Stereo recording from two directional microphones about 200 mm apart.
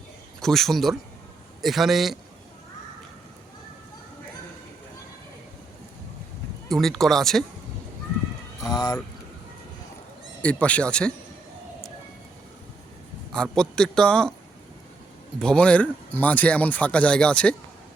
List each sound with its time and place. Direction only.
0.3 s speech: centre (ahead or behind)
6.7 s speech: centre (ahead or behind)
8.6 s speech: 20° left (ahead or behind)
10.4 s speech: 5° left (ahead or behind)
13.3 s speech: 5° left (ahead or behind)
15.4 s speech: 5° left (ahead or behind)